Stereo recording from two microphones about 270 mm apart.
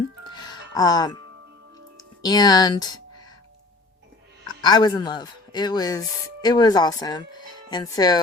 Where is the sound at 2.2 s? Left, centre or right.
Centre.